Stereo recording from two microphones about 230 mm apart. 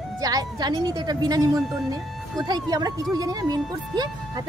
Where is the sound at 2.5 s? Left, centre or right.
Centre.